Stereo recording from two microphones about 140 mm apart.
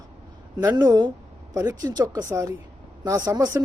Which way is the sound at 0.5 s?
25° right (ahead or behind).